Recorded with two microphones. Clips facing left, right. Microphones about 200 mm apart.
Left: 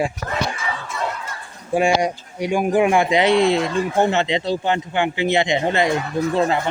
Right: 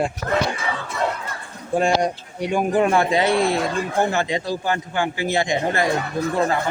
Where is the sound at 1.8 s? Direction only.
10° left (ahead or behind).